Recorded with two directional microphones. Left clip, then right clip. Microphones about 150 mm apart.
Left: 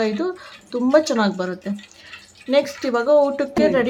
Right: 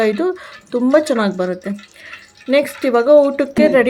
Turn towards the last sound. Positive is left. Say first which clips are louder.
# right 5 dB
turn(degrees=-25)  # may be behind; listen again after turning